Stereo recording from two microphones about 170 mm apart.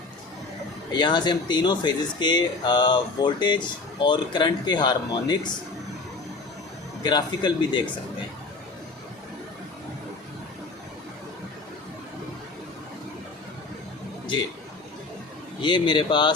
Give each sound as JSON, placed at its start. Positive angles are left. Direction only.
{"t": 0.9, "sound": "speech", "side_deg": 25}
{"t": 7.0, "sound": "speech", "side_deg": 25}
{"t": 15.6, "sound": "speech", "side_deg": 25}